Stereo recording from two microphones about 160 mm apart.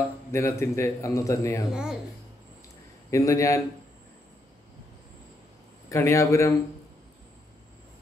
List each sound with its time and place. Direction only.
0.3 s a man's voice: 15° left (ahead or behind)
1.7 s speech: 5° right (ahead or behind)
3.1 s a man's voice: 20° left (ahead or behind)
5.9 s a man's voice: 20° left (ahead or behind)